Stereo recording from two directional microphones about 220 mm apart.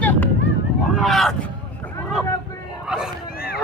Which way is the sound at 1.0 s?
Centre (ahead or behind).